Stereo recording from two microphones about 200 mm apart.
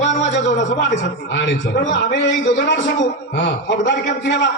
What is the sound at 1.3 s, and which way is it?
A man's voice, 60° left (ahead or behind).